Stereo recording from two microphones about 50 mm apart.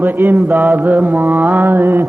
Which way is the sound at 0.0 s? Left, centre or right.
Right.